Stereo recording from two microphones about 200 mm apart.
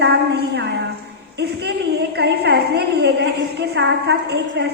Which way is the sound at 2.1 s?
55° right (ahead or behind).